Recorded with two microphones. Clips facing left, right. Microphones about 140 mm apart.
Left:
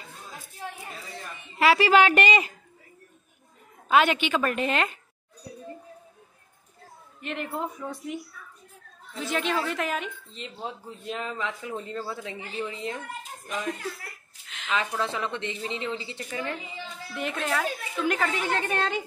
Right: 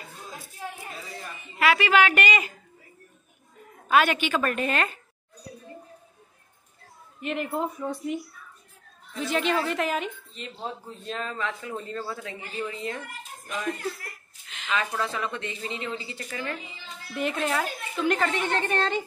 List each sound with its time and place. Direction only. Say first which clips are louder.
1.6 s a woman's voice: left 2 dB; 30° left (ahead or behind)
3.9 s speech: even; 20° left (ahead or behind)
7.2 s a woman's voice: right 3 dB; 5° right (ahead or behind)
9.2 s a woman's voice: right 2 dB; centre (ahead or behind)
10.3 s speech: right 1 dB; 15° left (ahead or behind)
14.5 s a sound: even; centre (ahead or behind)
14.8 s speech: even; 20° left (ahead or behind)
17.2 s a woman's voice: right 2 dB; centre (ahead or behind)